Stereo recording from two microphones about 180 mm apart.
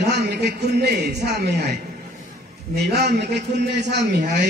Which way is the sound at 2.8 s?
65° right (ahead or behind).